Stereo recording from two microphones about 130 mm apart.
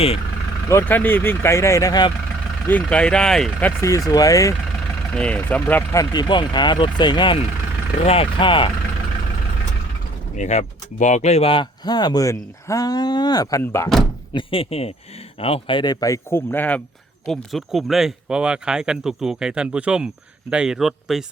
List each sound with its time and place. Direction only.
0.7 s speech: 15° left (ahead or behind)
2.6 s speech: 10° left (ahead or behind)
3.8 s speech: 25° left (ahead or behind)
5.1 s speech: 10° left (ahead or behind)
5.9 s speech: 30° left (ahead or behind)
8.0 s speech: 50° left (ahead or behind)
10.3 s speech: 65° left (ahead or behind); by 13.9 s 20° left (ahead or behind)
14.3 s speech: 45° left (ahead or behind); by 16.8 s 15° left (ahead or behind)
17.2 s speech: centre (ahead or behind)